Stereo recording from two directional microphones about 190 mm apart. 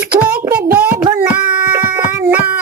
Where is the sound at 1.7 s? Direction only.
10° right (ahead or behind).